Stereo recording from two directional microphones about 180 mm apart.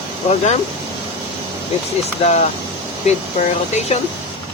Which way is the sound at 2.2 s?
40° left (ahead or behind).